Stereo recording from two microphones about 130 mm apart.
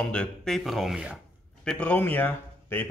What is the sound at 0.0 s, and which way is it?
Speech, 5° left (ahead or behind).